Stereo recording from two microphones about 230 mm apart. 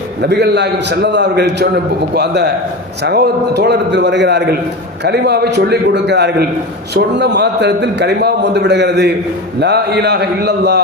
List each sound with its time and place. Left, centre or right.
0.2 s a man's voice: right